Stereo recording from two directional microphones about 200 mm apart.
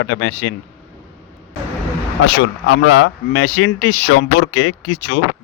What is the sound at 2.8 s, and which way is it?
A man's voice, 90° left.